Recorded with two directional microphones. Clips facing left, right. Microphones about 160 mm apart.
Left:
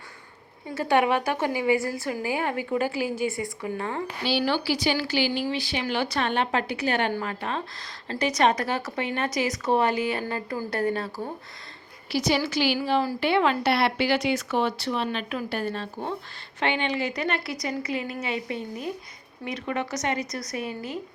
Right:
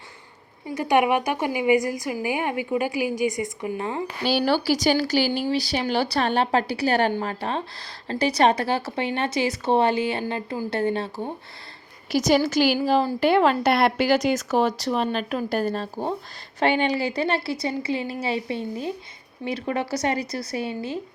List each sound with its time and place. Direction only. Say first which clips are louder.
0.7 s a woman's voice: right 2 dB; 15° right (ahead or behind)
4.2 s a woman's voice: right 4 dB; 45° right (ahead or behind); by 11.3 s 25° right (ahead or behind)
12.1 s a woman's voice: right 5 dB; 45° right (ahead or behind)